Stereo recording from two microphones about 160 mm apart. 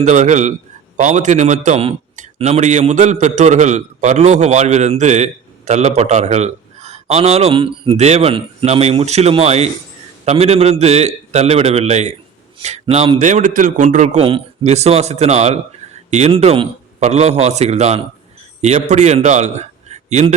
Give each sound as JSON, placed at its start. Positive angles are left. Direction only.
{"t": 0.0, "sound": "a man's voice", "side_deg": -45}